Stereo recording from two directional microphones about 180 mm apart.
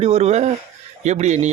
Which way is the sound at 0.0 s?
35° right (ahead or behind).